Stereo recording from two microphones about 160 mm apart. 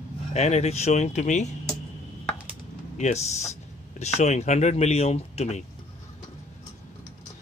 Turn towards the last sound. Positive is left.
turn(degrees=40)  # may be behind; listen again after turning